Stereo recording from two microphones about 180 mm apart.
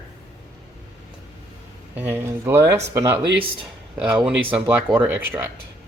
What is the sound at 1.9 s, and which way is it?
Speech, 10° right (ahead or behind).